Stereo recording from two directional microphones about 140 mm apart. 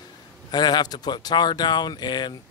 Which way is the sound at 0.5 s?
30° left (ahead or behind).